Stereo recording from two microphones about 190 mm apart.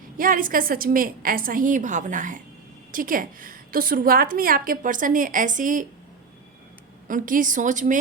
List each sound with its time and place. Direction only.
0.2 s a woman's voice: 45° right (ahead or behind)
7.1 s a woman's voice: 45° right (ahead or behind)